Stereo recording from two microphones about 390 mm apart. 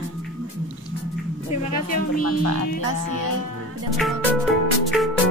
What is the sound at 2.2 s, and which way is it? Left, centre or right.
Speech, right.